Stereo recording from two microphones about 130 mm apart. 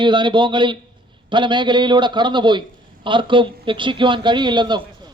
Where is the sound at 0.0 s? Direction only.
35° right (ahead or behind).